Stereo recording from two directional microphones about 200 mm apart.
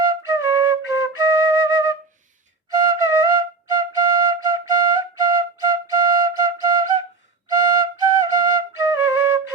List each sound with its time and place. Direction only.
0.0 s flute: 20° right (ahead or behind)